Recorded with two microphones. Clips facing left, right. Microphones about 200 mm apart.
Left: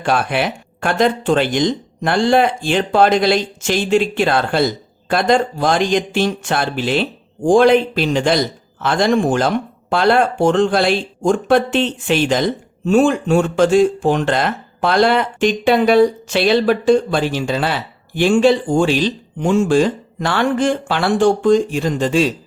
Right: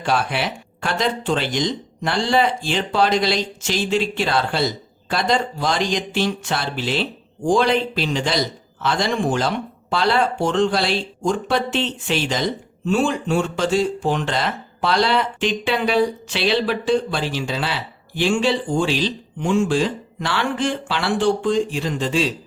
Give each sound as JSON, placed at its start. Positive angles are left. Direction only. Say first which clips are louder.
{"t": 0.0, "sound": "speech", "louder": "left 4 dB", "side_deg": 55}